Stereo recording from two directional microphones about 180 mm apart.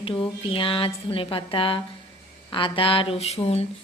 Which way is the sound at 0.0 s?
30° left (ahead or behind).